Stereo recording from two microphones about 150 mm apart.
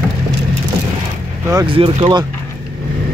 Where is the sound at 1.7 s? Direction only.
40° right (ahead or behind).